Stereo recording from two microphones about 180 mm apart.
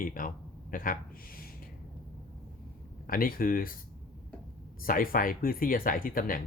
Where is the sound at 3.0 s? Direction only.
55° left (ahead or behind).